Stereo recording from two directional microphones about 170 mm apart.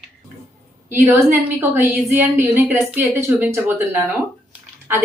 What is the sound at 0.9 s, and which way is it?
Speech, 15° right (ahead or behind).